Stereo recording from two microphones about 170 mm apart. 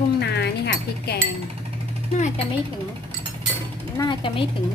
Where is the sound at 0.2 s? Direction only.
75° left (ahead or behind).